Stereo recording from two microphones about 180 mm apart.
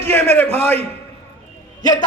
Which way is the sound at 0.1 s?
10° left (ahead or behind).